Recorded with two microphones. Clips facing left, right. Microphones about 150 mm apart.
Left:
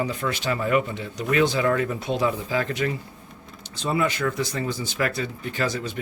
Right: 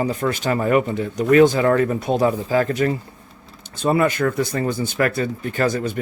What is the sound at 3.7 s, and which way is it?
Speech, 55° right (ahead or behind).